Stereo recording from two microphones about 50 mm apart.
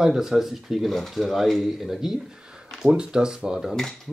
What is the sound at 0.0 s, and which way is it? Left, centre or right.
Speech, centre.